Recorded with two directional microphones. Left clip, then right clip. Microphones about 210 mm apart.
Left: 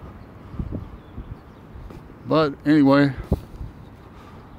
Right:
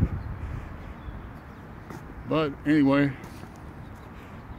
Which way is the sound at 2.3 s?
25° left (ahead or behind).